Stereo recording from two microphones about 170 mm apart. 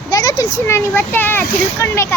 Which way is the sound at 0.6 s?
15° left (ahead or behind).